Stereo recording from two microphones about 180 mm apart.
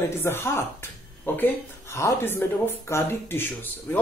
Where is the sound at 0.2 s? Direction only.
10° left (ahead or behind).